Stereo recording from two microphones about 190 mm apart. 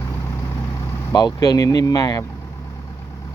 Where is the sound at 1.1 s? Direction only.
20° left (ahead or behind).